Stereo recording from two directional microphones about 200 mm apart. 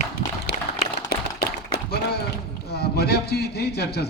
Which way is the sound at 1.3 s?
55° left (ahead or behind).